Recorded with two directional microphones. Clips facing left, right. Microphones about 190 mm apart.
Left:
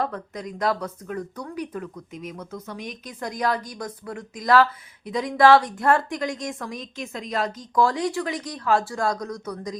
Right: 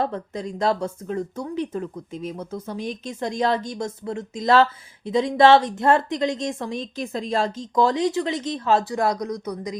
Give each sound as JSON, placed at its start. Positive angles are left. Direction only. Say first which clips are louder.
{"t": 0.0, "sound": "speech", "louder": "right 3 dB", "side_deg": -25}